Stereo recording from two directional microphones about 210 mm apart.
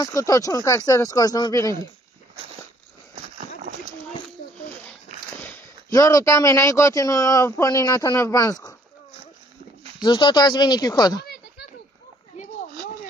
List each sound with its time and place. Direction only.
0.0 s speech: 15° left (ahead or behind)
5.4 s speech: 10° left (ahead or behind)
10.0 s speech: 20° left (ahead or behind)